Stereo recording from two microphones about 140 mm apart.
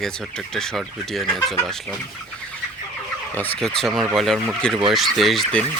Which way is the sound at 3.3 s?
10° left (ahead or behind).